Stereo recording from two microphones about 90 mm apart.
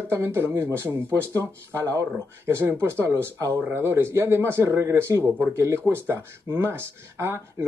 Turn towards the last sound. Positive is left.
turn(degrees=-30)  # may be behind; listen again after turning